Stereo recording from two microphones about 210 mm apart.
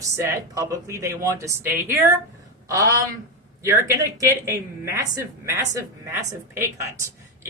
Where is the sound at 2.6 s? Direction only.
15° right (ahead or behind).